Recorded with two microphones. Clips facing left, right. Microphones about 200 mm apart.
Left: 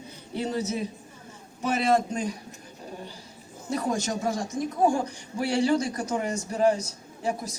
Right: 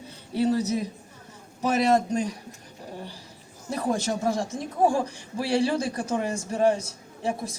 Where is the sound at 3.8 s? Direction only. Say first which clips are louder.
Right 2 dB; 30° right (ahead or behind).